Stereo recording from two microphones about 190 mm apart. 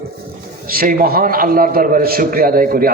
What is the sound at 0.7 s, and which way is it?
A man's voice, 50° right (ahead or behind).